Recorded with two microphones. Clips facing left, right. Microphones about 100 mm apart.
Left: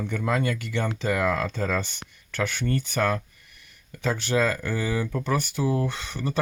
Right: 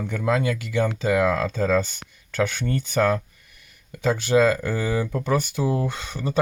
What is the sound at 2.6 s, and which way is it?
Speech, 15° right (ahead or behind).